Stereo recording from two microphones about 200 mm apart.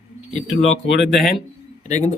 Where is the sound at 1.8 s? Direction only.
35° left (ahead or behind).